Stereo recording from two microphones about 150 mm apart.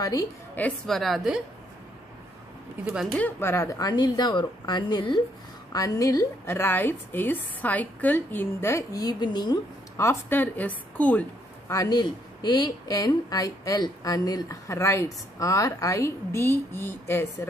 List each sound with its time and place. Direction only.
0.0 s a woman's voice: 25° left (ahead or behind)
0.6 s a woman's voice: 5° left (ahead or behind)
2.8 s speech: 10° right (ahead or behind)
3.2 s a woman's voice: 15° left (ahead or behind)
11.7 s a woman's voice: 25° left (ahead or behind)